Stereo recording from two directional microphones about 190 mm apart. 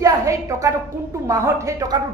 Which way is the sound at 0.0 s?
15° right (ahead or behind).